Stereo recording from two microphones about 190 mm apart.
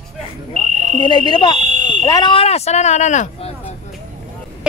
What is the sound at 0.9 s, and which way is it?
Speech, 25° left (ahead or behind).